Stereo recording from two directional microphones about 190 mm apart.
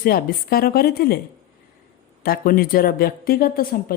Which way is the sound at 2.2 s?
50° left (ahead or behind).